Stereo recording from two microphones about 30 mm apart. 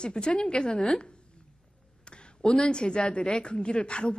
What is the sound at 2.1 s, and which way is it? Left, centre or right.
A woman's voice, left.